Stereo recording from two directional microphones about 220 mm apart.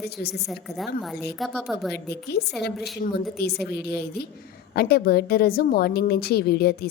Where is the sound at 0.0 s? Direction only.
45° left (ahead or behind).